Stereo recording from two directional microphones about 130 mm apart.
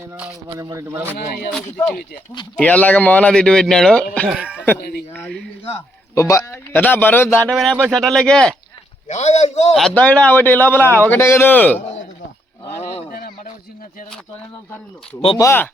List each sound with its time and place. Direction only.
0.4 s speech: 25° right (ahead or behind)
1.6 s a man's voice: 10° left (ahead or behind)
4.4 s speech: 10° right (ahead or behind)
4.6 s a man's voice: 15° left (ahead or behind)
6.1 s a man's voice: 25° left (ahead or behind)
7.5 s speech: centre (ahead or behind)
9.0 s a man's voice: 60° left (ahead or behind)
9.7 s a man's voice: 5° left (ahead or behind)
12.8 s a sound: 75° left (ahead or behind)
15.4 s speech: 20° left (ahead or behind)